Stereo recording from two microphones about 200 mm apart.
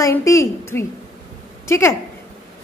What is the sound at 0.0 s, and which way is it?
A woman's voice, 15° left (ahead or behind).